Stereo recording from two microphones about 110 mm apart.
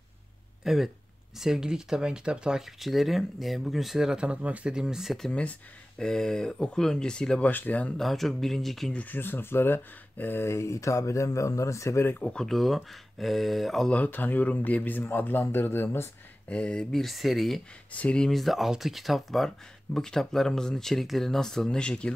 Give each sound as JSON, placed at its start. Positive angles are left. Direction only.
{"t": 0.7, "sound": "speech", "side_deg": -5}
{"t": 8.0, "sound": "speech", "side_deg": 0}
{"t": 8.9, "sound": "speech", "side_deg": 15}
{"t": 12.2, "sound": "speech", "side_deg": 10}
{"t": 13.9, "sound": "speech", "side_deg": 15}
{"t": 16.4, "sound": "speech", "side_deg": 10}
{"t": 17.9, "sound": "speech", "side_deg": 10}